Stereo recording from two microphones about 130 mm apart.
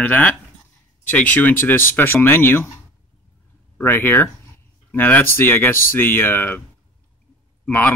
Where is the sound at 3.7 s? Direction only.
15° left (ahead or behind).